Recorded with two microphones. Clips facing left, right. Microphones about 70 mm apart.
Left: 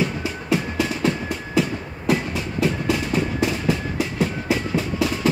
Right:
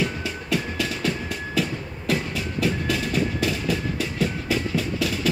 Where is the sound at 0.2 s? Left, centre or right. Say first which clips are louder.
Left 3 dB; left.